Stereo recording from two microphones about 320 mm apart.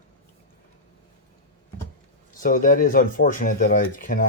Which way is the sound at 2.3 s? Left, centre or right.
Left.